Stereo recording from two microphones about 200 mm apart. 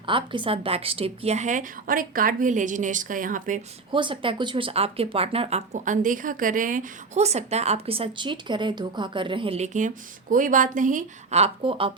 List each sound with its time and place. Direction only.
0.0 s speech: 25° right (ahead or behind); by 3.6 s 40° right (ahead or behind)
3.9 s speech: 25° right (ahead or behind)